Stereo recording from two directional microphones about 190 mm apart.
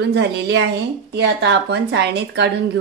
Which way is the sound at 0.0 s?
65° right (ahead or behind).